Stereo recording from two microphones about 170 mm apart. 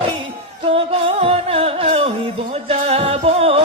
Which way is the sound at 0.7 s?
35° right (ahead or behind).